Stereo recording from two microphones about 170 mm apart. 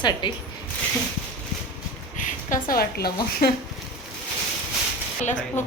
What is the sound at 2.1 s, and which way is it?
A woman's voice, 50° left (ahead or behind).